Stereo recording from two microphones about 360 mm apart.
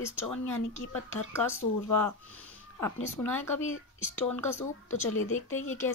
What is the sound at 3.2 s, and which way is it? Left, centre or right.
Speech, centre.